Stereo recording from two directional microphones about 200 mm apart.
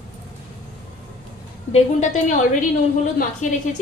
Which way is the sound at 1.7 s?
40° left (ahead or behind).